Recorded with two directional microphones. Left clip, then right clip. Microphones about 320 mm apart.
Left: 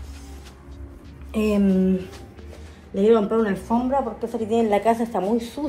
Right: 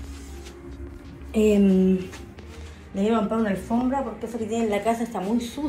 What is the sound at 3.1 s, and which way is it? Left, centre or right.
A woman's voice, centre.